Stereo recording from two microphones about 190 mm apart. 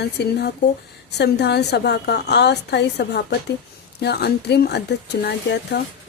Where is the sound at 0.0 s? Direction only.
60° left (ahead or behind).